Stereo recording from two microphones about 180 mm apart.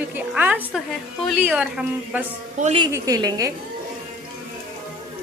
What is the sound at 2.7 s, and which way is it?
Speech, 20° right (ahead or behind).